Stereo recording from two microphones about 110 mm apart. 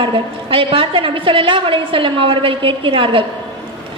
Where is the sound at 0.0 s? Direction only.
55° right (ahead or behind).